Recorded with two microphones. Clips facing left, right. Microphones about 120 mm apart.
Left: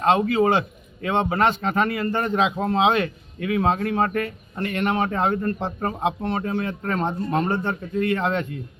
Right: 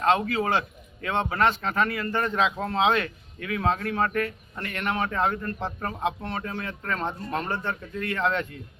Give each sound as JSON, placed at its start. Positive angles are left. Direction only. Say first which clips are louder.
{"t": 0.0, "sound": "a man's voice", "louder": "left 5 dB", "side_deg": 25}